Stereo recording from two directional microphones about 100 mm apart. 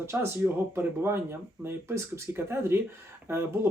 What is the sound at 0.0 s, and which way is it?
Speech, 25° right (ahead or behind).